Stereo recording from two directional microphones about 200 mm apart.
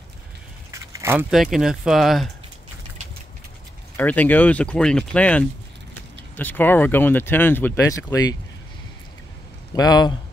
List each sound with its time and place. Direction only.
0.9 s a sound: 10° right (ahead or behind)
1.3 s speech: centre (ahead or behind)
3.9 s speech: 10° left (ahead or behind)
9.8 s speech: 20° left (ahead or behind)